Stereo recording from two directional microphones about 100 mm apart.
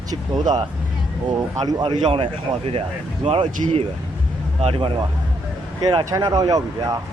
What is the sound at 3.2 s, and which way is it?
Speech, 85° right.